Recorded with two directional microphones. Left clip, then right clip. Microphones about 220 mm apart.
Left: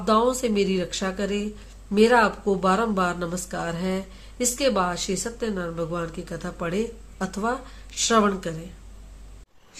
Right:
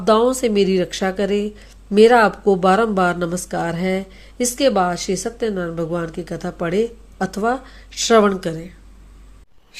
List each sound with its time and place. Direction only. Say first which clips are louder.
0.0 s speech: right 6 dB; 30° right (ahead or behind)